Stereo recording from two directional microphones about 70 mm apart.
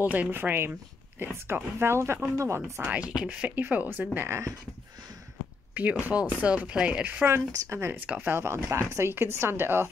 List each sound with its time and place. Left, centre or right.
0.0 s a woman's voice: right
3.1 s speech: centre
4.3 s speech: right
5.8 s speech: right
7.2 s a woman's voice: right